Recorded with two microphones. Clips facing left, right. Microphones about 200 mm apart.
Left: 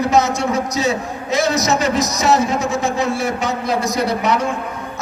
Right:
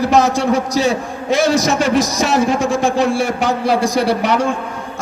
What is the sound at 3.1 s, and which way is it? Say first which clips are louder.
A man's voice: right 3 dB; 30° right (ahead or behind).